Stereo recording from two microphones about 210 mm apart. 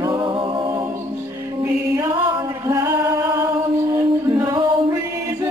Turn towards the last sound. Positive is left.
turn(degrees=-15)  # may be behind; listen again after turning